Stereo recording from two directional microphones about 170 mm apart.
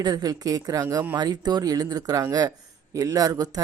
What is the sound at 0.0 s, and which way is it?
Speech, 25° right (ahead or behind).